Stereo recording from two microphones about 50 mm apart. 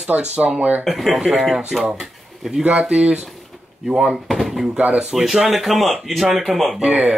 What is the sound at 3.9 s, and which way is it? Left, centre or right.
Speech, centre.